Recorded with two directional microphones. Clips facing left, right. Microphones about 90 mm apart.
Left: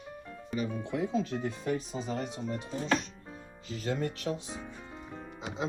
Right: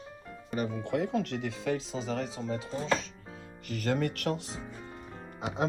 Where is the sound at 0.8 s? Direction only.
60° right (ahead or behind); by 2.2 s 90° right.